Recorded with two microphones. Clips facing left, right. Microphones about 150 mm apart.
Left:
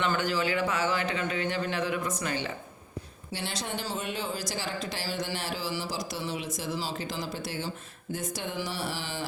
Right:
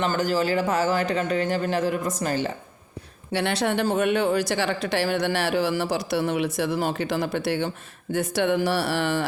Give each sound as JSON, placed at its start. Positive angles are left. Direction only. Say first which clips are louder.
{"t": 0.0, "sound": "speech", "louder": "right 5 dB", "side_deg": -40}
{"t": 3.3, "sound": "speech", "louder": "right 11 dB", "side_deg": -65}